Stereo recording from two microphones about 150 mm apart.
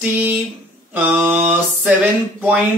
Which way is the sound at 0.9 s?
10° right (ahead or behind).